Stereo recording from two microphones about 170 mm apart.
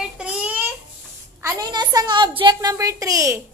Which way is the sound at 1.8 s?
25° right (ahead or behind).